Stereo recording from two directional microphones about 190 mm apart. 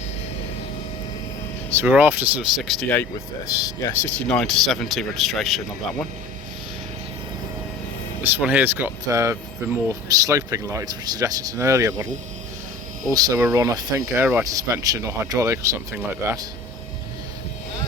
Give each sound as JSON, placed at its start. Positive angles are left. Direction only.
{"t": 1.7, "sound": "speech", "side_deg": -10}
{"t": 3.4, "sound": "a man's voice", "side_deg": 15}
{"t": 8.2, "sound": "speech", "side_deg": -10}
{"t": 13.1, "sound": "speech", "side_deg": -20}